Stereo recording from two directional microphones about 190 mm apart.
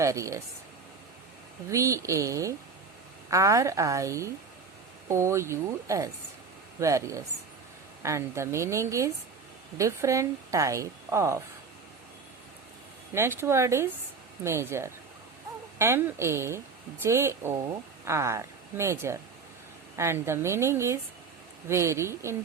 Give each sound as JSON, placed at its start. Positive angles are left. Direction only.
{"t": 0.0, "sound": "speech", "side_deg": -15}
{"t": 1.7, "sound": "speech", "side_deg": -15}
{"t": 13.1, "sound": "speech", "side_deg": -15}